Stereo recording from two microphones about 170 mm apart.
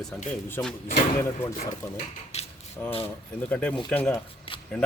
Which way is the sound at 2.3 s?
40° left (ahead or behind).